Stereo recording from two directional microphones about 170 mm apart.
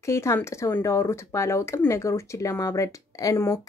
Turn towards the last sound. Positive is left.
turn(degrees=20)  # may be behind; listen again after turning